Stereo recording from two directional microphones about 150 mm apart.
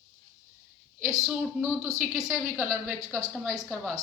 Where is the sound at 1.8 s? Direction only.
20° right (ahead or behind).